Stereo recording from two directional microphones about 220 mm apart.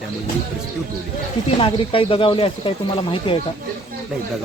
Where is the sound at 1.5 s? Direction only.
25° left (ahead or behind).